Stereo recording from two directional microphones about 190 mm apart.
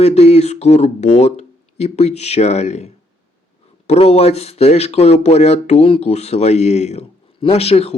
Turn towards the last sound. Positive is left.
turn(degrees=30)  # may be behind; listen again after turning